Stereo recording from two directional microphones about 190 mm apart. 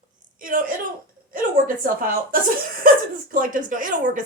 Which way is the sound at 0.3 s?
45° right (ahead or behind).